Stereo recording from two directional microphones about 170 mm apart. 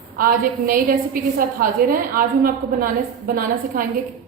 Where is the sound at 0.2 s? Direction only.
55° right (ahead or behind).